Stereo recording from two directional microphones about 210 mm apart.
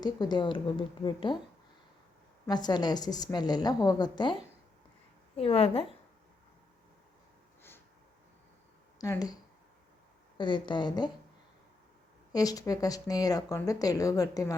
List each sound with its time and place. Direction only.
0.0 s a woman's voice: 20° left (ahead or behind)
2.5 s a woman's voice: 20° left (ahead or behind)
5.4 s a woman's voice: 25° left (ahead or behind)
9.0 s a woman's voice: 15° left (ahead or behind)
12.3 s speech: 15° left (ahead or behind)